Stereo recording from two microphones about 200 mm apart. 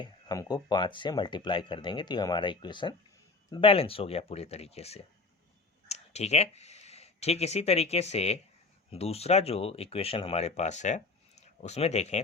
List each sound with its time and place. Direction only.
0.0 s speech: 20° left (ahead or behind)